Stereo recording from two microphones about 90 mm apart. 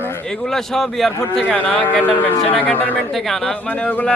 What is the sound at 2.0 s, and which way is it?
Speech, 20° left (ahead or behind).